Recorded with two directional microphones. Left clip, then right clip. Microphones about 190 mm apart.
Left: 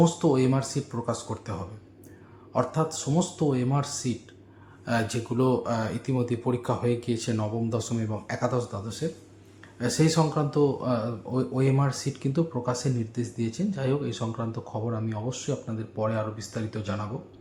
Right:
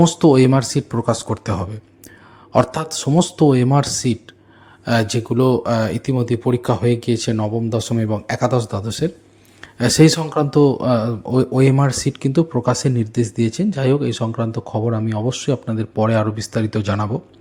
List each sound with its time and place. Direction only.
0.0 s speech: 45° right (ahead or behind)